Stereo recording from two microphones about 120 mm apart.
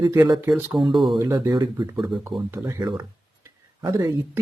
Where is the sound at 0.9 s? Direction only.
Centre (ahead or behind).